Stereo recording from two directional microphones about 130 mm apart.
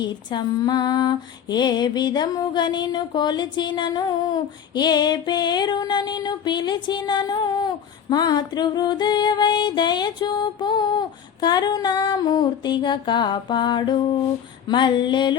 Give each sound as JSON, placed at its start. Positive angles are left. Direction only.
{"t": 0.0, "sound": "female singing", "side_deg": 35}